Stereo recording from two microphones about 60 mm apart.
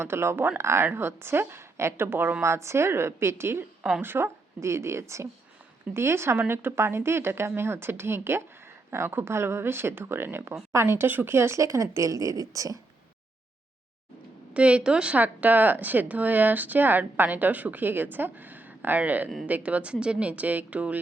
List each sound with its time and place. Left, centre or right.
0.0 s a woman's voice: right
2.4 s a woman's voice: right
4.6 s a woman's voice: right
11.3 s a woman's voice: right
14.5 s speech: centre
15.2 s speech: right